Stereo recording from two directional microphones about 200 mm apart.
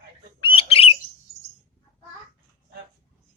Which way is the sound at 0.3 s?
25° left (ahead or behind).